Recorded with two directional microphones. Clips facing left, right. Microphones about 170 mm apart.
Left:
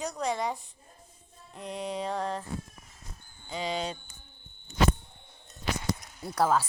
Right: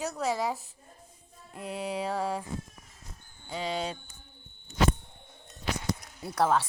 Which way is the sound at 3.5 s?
10° right (ahead or behind).